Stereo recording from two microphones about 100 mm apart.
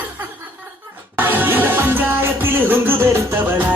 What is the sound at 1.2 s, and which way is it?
Music, 20° right (ahead or behind).